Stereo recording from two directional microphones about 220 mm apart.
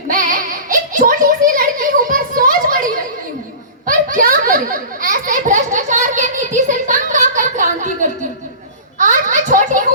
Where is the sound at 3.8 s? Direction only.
35° right (ahead or behind).